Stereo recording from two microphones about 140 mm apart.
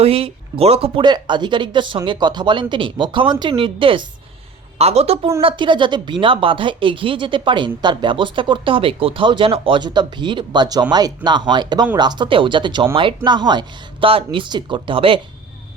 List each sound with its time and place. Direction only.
0.0 s a woman's voice: 45° right (ahead or behind)